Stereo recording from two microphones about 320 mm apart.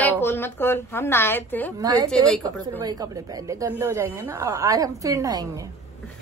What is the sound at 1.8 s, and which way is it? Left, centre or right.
Speech, centre.